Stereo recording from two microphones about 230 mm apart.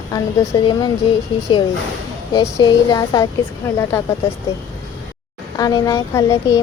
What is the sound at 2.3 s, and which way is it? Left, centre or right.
Speech, centre.